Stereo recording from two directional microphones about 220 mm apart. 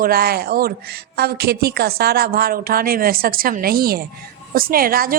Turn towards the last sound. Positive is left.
turn(degrees=-40)  # may be behind; listen again after turning